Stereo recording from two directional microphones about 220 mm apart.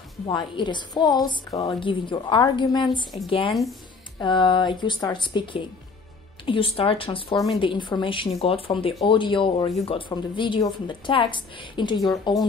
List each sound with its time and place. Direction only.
0.3 s speech: 20° left (ahead or behind)